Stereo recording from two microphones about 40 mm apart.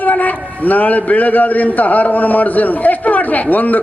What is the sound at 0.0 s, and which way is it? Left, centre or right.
A man's voice, left.